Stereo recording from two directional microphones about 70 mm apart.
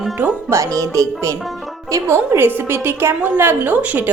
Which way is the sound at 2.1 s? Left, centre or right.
Right.